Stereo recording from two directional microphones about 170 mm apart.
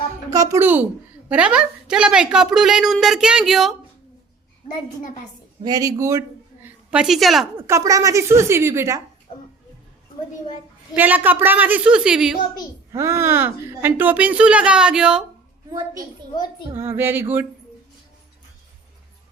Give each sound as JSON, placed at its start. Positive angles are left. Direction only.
{"t": 0.3, "sound": "a woman's voice", "side_deg": -20}
{"t": 5.6, "sound": "a woman's voice", "side_deg": -20}
{"t": 7.7, "sound": "speech", "side_deg": -20}
{"t": 9.3, "sound": "music", "side_deg": 45}
{"t": 10.9, "sound": "speech", "side_deg": -10}
{"t": 12.9, "sound": "speech", "side_deg": -15}
{"t": 16.7, "sound": "speech", "side_deg": -15}